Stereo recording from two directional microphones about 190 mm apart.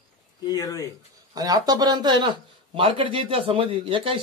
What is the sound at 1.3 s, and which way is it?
Speech, 20° right (ahead or behind).